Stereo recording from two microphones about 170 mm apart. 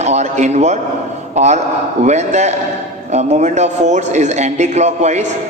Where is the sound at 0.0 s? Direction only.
40° right (ahead or behind).